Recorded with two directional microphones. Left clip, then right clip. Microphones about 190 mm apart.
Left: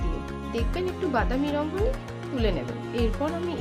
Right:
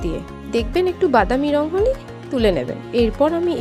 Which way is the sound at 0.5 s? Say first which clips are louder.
Right 11 dB; 45° right (ahead or behind).